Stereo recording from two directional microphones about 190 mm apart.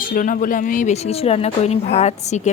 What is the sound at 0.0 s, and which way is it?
Speech, 45° left (ahead or behind).